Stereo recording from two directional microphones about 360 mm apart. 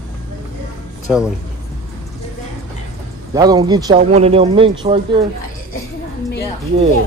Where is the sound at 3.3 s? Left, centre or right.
Centre.